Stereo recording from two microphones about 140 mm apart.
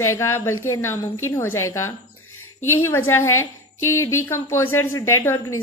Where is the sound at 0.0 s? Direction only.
20° left (ahead or behind).